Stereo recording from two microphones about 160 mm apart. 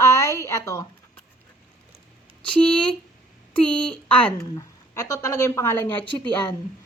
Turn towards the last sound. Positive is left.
turn(degrees=10)  # may be behind; listen again after turning